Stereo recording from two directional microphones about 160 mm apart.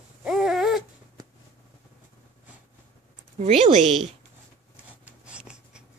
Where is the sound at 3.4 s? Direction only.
40° right (ahead or behind).